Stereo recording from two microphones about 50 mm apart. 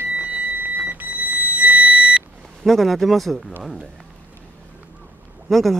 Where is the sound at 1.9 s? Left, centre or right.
Centre.